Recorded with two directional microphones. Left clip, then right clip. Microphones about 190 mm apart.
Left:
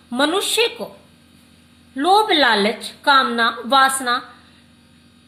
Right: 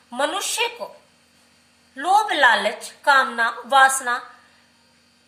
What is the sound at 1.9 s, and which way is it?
A woman's voice, 40° left (ahead or behind).